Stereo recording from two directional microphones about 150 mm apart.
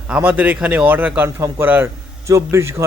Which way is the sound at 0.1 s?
10° right (ahead or behind).